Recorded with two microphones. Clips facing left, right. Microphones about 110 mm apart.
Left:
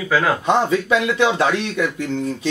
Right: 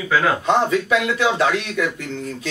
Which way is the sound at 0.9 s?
25° left (ahead or behind).